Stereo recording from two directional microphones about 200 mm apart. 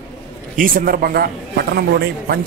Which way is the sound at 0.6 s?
45° right (ahead or behind).